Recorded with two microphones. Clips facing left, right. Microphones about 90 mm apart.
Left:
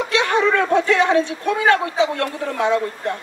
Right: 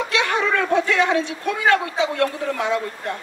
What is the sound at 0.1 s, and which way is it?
A woman's voice, 35° left (ahead or behind).